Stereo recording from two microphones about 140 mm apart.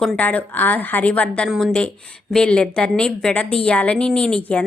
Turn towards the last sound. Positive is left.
turn(degrees=5)  # may be behind; listen again after turning